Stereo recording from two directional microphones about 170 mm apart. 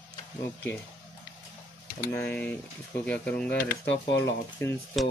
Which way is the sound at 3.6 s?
60° left (ahead or behind).